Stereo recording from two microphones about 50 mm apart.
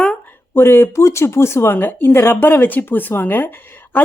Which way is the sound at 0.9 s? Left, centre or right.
Left.